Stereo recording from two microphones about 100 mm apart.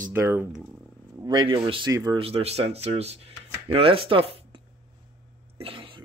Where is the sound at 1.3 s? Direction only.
50° right (ahead or behind).